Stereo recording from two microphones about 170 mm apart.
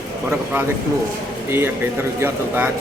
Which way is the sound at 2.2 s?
10° right (ahead or behind).